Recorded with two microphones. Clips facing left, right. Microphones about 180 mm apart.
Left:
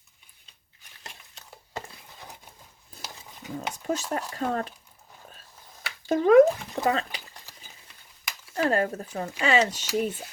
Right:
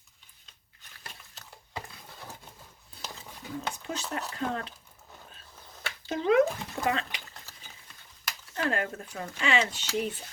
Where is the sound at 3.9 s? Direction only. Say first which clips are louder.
Left 9 dB; 45° left (ahead or behind).